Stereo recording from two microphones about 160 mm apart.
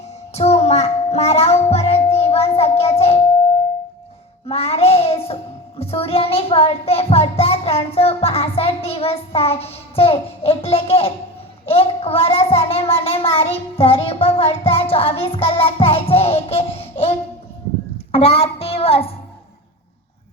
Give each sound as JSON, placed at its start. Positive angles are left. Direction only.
{"t": 0.3, "sound": "music", "side_deg": 40}
{"t": 4.4, "sound": "child singing", "side_deg": 40}
{"t": 5.8, "sound": "a child's voice", "side_deg": 40}
{"t": 7.9, "sound": "music", "side_deg": 40}
{"t": 11.6, "sound": "a sound", "side_deg": 40}
{"t": 18.1, "sound": "a child's voice", "side_deg": 40}